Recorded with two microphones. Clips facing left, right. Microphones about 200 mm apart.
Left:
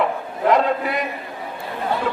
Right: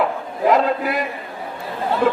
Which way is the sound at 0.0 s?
Centre (ahead or behind).